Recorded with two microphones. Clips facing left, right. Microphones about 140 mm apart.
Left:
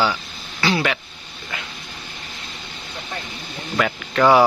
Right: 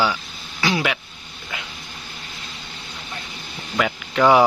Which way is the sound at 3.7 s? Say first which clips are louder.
Left 1 dB; 10° right (ahead or behind).